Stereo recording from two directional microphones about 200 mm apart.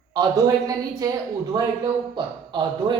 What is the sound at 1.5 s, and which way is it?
A man's voice, 20° right (ahead or behind).